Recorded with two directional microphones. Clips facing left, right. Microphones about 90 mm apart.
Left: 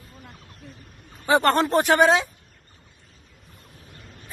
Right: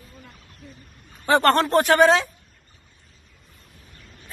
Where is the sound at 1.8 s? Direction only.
15° left (ahead or behind).